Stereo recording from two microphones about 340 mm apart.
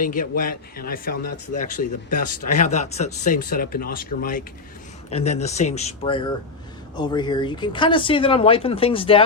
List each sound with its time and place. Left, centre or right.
0.0 s speech: left